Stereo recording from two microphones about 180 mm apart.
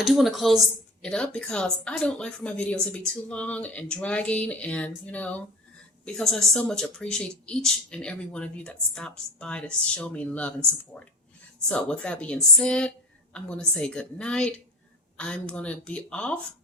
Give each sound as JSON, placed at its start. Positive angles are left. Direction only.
{"t": 0.0, "sound": "speech", "side_deg": 0}
{"t": 11.7, "sound": "speech", "side_deg": 5}